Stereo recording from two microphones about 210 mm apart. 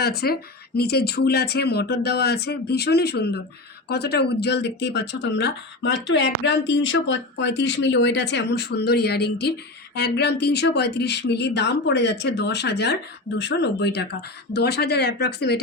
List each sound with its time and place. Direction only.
0.0 s speech: 50° left (ahead or behind)